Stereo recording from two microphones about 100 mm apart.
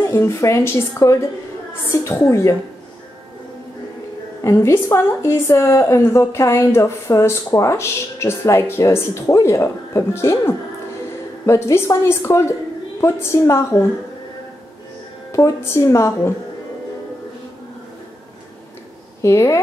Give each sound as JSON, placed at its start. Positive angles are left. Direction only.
{"t": 0.0, "sound": "a woman's voice", "side_deg": 30}
{"t": 4.4, "sound": "a woman's voice", "side_deg": 30}
{"t": 15.3, "sound": "a woman's voice", "side_deg": 30}
{"t": 19.2, "sound": "a woman's voice", "side_deg": 30}